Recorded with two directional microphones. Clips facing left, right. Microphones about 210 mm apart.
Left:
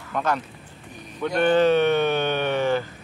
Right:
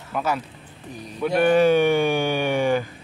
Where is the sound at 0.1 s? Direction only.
5° right (ahead or behind).